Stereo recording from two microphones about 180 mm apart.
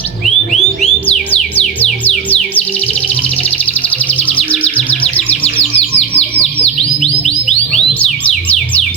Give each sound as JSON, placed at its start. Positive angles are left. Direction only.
{"t": 3.8, "sound": "music", "side_deg": 10}
{"t": 6.1, "sound": "bird", "side_deg": 35}
{"t": 8.2, "sound": "music", "side_deg": 10}